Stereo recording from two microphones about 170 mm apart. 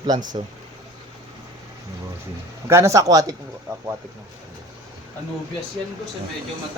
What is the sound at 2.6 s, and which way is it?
Speech, 15° right (ahead or behind).